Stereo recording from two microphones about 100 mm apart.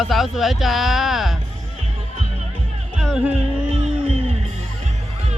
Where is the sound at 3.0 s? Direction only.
5° right (ahead or behind).